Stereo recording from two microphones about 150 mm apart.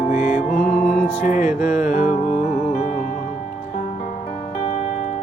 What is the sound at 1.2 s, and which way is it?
Music, 60° left (ahead or behind).